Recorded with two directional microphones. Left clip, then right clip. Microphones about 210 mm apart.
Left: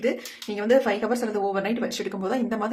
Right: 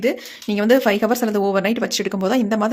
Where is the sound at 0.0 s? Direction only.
45° right (ahead or behind).